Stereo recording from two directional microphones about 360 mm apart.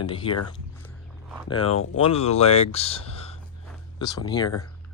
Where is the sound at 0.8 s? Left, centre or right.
Centre.